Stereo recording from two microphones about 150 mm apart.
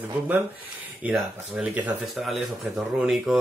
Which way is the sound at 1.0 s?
5° right (ahead or behind).